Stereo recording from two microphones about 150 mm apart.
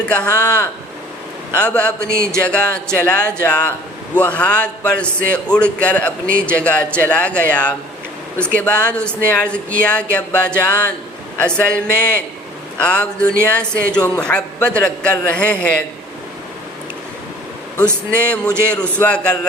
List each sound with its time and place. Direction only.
0.0 s a man's voice: 10° left (ahead or behind)
2.0 s a sound: 70° right (ahead or behind)
2.4 s a man's voice: 5° left (ahead or behind)
18.1 s a man's voice: 10° left (ahead or behind)